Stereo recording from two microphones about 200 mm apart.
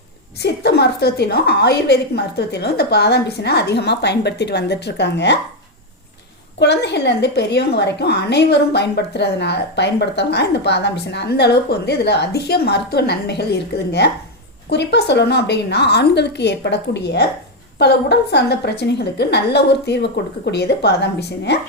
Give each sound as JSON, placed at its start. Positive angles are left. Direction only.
{"t": 0.3, "sound": "a woman's voice", "side_deg": 55}
{"t": 6.6, "sound": "a woman's voice", "side_deg": 60}